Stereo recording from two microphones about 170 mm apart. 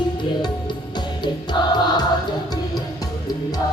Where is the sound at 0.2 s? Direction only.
25° left (ahead or behind).